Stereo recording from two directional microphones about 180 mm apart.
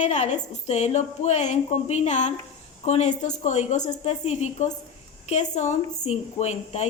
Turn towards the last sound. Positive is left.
turn(degrees=35)  # may be behind; listen again after turning